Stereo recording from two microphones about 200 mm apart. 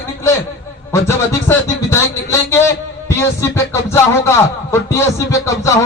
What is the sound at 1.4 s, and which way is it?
A man's voice, 15° left (ahead or behind).